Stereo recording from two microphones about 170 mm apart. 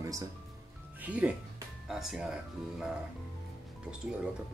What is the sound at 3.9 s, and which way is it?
Speech, 5° right (ahead or behind).